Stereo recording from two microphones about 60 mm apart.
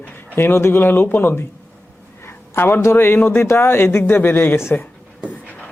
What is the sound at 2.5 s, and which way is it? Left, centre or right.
Speech, left.